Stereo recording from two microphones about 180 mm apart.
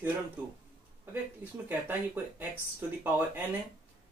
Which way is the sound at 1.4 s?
10° right (ahead or behind).